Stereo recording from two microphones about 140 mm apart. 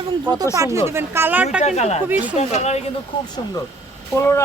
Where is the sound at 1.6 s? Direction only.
55° left (ahead or behind).